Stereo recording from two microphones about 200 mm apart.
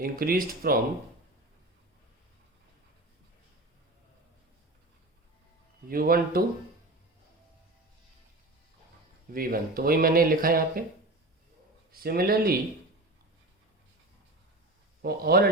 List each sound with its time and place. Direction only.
0.0 s speech: 50° right (ahead or behind)
5.9 s speech: 45° right (ahead or behind)
9.3 s speech: 45° right (ahead or behind)
11.9 s speech: 50° right (ahead or behind)
15.0 s speech: 50° right (ahead or behind)